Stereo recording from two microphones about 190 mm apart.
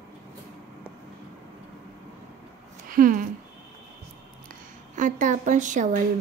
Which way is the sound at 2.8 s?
45° right (ahead or behind).